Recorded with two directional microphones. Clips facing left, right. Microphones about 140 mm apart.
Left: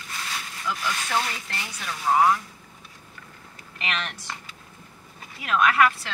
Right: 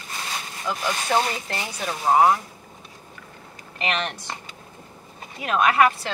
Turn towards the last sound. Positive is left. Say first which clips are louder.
# right 2 dB
turn(degrees=-30)  # may be behind; listen again after turning